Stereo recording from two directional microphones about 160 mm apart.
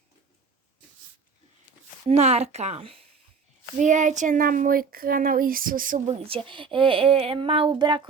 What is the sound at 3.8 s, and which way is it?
A child's voice, 50° right (ahead or behind).